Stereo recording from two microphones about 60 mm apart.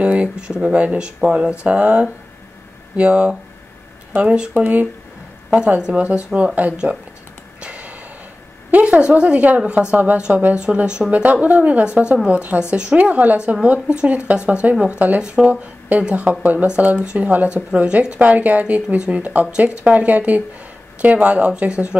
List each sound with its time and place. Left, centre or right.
0.0 s speech: right
7.6 s snort: right
8.7 s speech: right
11.8 s speech: centre